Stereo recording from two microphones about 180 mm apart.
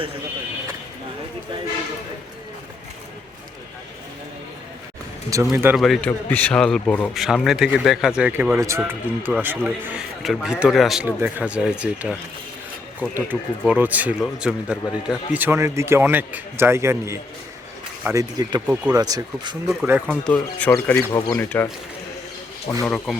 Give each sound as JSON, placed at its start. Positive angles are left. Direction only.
{"t": 5.3, "sound": "speech", "side_deg": -15}
{"t": 5.7, "sound": "a man's voice", "side_deg": 0}
{"t": 13.1, "sound": "speech", "side_deg": -10}
{"t": 19.6, "sound": "a man's voice", "side_deg": -5}
{"t": 21.1, "sound": "speech", "side_deg": 20}
{"t": 21.3, "sound": "speech", "side_deg": 10}
{"t": 22.7, "sound": "speech", "side_deg": 10}